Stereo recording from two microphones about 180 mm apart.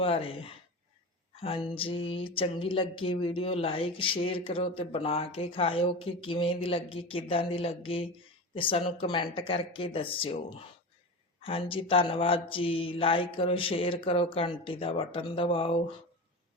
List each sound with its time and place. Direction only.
0.0 s speech: 30° left (ahead or behind)
1.4 s mantra: 30° left (ahead or behind)
4.4 s speech: 30° left (ahead or behind)
8.5 s mantra: 30° left (ahead or behind)
11.3 s speech: 30° left (ahead or behind)
11.9 s mantra: 30° left (ahead or behind)